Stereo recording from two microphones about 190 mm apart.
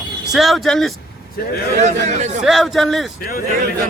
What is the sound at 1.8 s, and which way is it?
Speech, 40° right (ahead or behind).